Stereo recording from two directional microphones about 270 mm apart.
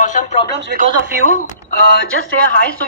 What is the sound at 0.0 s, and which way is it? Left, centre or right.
Radio, left.